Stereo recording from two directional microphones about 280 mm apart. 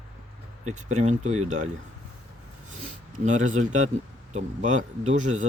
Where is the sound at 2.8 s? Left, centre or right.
Right.